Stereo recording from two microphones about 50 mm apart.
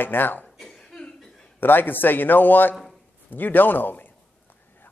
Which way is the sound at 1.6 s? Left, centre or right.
Left.